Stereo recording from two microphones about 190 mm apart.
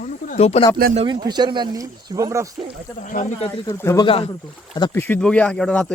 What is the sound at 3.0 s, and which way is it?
Speech, 40° left (ahead or behind).